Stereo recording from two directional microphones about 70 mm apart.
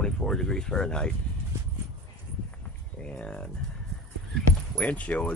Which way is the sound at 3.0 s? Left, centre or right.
Centre.